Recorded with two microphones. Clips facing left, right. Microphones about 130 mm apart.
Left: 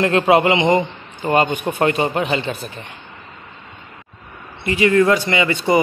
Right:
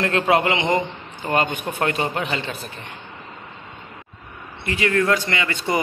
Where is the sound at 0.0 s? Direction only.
10° left (ahead or behind).